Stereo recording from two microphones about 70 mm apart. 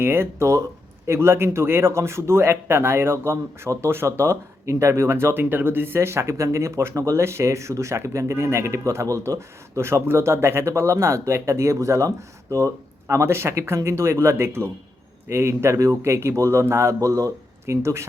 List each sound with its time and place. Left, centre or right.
0.0 s a man's voice: right